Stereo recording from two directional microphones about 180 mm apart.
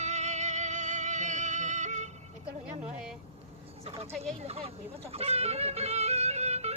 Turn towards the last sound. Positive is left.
turn(degrees=-35)  # may be behind; listen again after turning